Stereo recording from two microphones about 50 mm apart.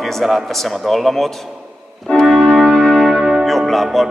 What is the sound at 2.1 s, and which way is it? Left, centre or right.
Organ, left.